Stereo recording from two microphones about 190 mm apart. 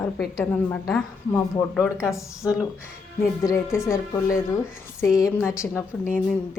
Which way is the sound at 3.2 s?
15° left (ahead or behind).